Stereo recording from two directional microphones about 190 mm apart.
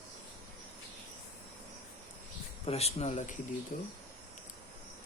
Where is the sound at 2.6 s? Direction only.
35° left (ahead or behind).